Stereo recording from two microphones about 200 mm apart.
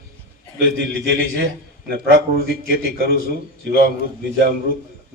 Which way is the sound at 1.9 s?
50° right (ahead or behind).